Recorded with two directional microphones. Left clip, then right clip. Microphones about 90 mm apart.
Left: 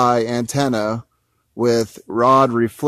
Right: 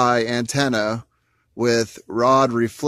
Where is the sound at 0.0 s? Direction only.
55° left (ahead or behind).